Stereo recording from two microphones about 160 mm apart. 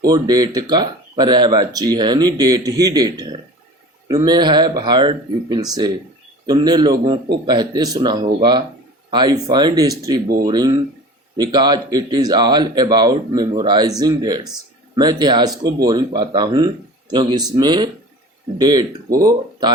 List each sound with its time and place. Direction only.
0.0 s speech: 25° right (ahead or behind)